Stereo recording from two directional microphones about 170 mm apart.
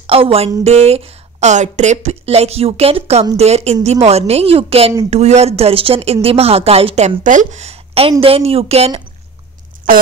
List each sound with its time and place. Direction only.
0.0 s a woman's voice: 35° right (ahead or behind)
7.2 s a woman's voice: 45° right (ahead or behind)
9.8 s a sound: 55° right (ahead or behind)